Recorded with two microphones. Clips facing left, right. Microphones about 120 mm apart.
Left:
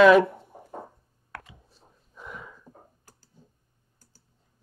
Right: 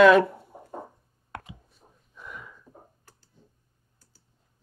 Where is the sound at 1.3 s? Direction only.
20° right (ahead or behind).